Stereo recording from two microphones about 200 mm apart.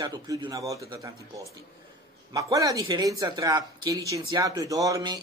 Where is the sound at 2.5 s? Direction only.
15° right (ahead or behind).